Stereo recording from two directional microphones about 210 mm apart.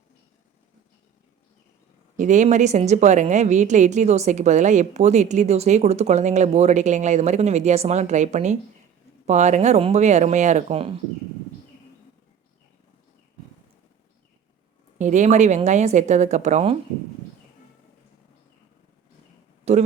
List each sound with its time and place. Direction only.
2.1 s a woman's voice: 35° right (ahead or behind)
14.9 s a woman's voice: 35° right (ahead or behind)
19.7 s a woman's voice: 30° right (ahead or behind)